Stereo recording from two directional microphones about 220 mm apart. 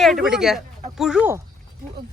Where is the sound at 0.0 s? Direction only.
Centre (ahead or behind).